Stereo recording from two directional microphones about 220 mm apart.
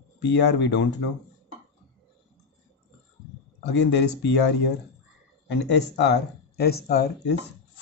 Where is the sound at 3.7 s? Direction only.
50° left (ahead or behind).